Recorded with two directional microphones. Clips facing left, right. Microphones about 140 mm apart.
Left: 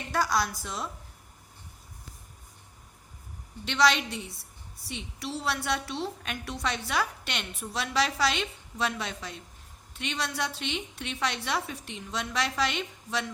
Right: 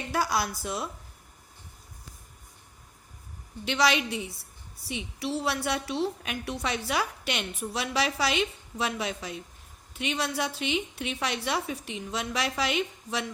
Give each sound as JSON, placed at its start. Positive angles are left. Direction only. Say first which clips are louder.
{"t": 0.1, "sound": "a woman's voice", "louder": "left 1 dB", "side_deg": -10}
{"t": 3.7, "sound": "a woman's voice", "louder": "even", "side_deg": -5}